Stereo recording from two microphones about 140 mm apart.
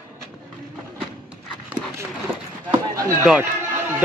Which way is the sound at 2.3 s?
15° right (ahead or behind).